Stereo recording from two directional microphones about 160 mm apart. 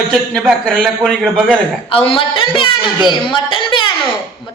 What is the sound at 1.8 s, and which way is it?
A woman's voice, 35° left (ahead or behind).